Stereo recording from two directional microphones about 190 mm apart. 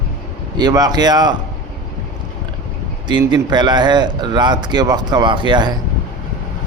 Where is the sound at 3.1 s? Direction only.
25° right (ahead or behind).